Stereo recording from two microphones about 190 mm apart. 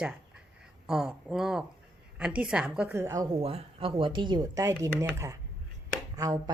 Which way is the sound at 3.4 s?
30° right (ahead or behind).